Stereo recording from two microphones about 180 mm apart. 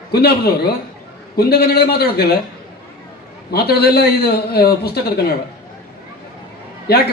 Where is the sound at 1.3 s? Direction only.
60° left (ahead or behind).